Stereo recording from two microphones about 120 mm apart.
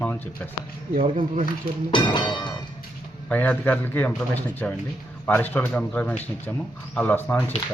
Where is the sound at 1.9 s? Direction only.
40° left (ahead or behind).